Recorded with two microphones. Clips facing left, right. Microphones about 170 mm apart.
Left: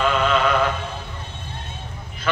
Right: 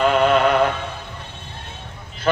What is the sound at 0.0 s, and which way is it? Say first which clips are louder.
Music: right 4 dB; 40° right (ahead or behind).